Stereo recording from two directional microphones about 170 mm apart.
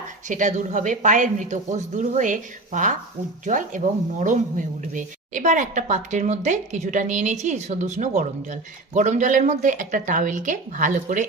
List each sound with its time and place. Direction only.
0.3 s speech: 50° right (ahead or behind)